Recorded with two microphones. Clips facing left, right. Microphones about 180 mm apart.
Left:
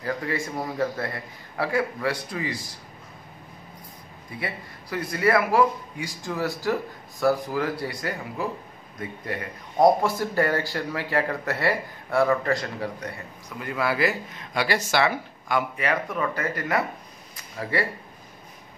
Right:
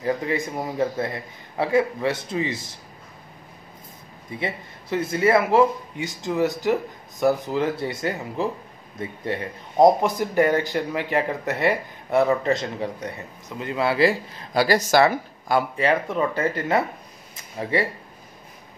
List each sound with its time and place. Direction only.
0.0 s speech: 20° right (ahead or behind)
4.4 s speech: 25° right (ahead or behind)